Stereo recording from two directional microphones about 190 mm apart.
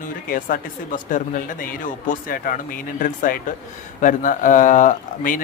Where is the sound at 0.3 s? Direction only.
45° left (ahead or behind).